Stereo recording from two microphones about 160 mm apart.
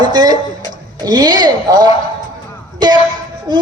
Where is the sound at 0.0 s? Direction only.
25° right (ahead or behind).